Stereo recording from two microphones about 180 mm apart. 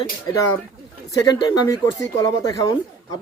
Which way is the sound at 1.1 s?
20° left (ahead or behind).